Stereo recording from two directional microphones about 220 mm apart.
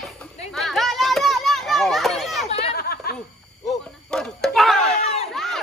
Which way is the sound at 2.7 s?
45° left (ahead or behind).